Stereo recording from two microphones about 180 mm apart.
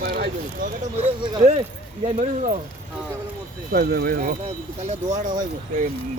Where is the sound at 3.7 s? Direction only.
60° right (ahead or behind).